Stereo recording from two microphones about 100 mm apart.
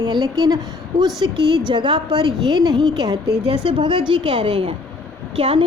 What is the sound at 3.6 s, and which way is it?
A woman's voice, 55° right (ahead or behind).